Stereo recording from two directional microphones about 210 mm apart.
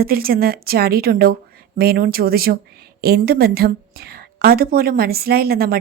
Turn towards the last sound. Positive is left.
turn(degrees=-45)  # may be behind; listen again after turning